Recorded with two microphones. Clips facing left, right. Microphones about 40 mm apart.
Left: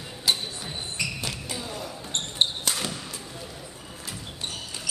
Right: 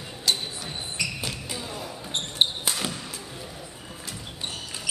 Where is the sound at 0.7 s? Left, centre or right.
Centre.